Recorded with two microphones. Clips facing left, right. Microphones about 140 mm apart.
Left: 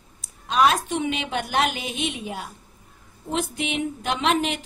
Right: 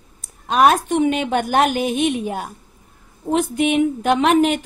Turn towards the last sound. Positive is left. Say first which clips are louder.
# right 8 dB
turn(degrees=-55)  # may be behind; listen again after turning